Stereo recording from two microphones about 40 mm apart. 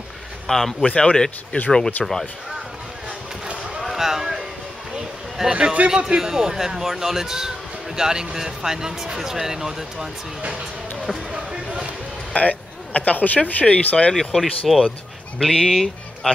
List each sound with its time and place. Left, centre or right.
0.5 s speech: centre
0.8 s speech: left
1.1 s speech: centre
2.0 s speech: centre
3.8 s a sound: centre
5.5 s speech: right
12.4 s speech: left
14.3 s speech: centre